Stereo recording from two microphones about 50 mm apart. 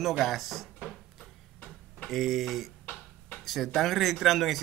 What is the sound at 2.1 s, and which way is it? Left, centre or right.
Speech, centre.